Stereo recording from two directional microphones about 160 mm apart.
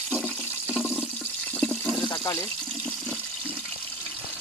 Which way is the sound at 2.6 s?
5° left (ahead or behind).